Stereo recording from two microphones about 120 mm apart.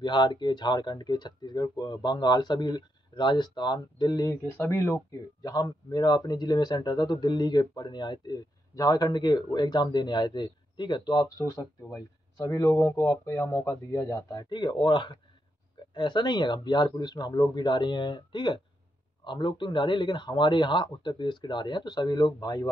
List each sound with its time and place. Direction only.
0.0 s speech: 40° left (ahead or behind)
4.5 s speech: 20° left (ahead or behind)
5.4 s speech: 35° left (ahead or behind)